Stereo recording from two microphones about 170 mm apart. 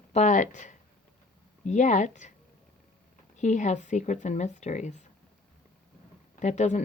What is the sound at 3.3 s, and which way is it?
Speech, 45° left (ahead or behind).